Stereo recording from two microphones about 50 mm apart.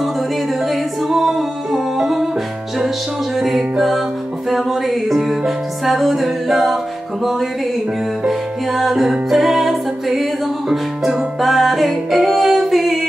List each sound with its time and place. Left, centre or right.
0.7 s music: centre
3.3 s music: centre
8.3 s music: centre